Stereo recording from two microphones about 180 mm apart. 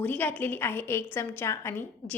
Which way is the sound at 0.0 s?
10° left (ahead or behind).